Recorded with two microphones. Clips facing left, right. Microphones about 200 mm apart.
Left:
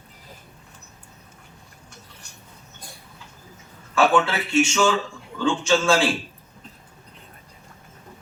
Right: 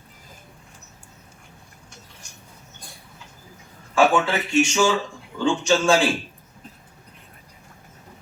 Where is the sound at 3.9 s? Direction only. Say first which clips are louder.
Right 1 dB; 15° right (ahead or behind).